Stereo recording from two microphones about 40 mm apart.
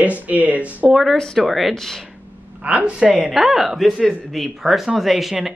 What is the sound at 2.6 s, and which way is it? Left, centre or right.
Speech, right.